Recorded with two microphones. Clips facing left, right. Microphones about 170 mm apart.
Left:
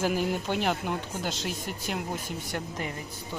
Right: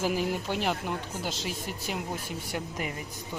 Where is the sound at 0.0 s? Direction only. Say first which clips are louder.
Left 1 dB; centre (ahead or behind).